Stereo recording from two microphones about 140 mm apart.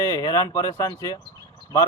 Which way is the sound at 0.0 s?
25° left (ahead or behind).